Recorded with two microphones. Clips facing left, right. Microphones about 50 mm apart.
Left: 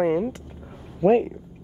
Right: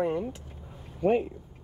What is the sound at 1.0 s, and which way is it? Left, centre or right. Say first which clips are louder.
Speech: left 6 dB; left.